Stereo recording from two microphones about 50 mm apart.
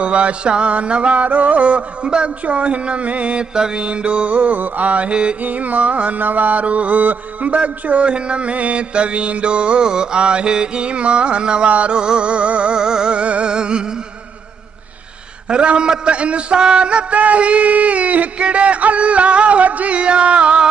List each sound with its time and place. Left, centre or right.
0.0 s mantra: right
5.4 s mantra: right
15.4 s mantra: right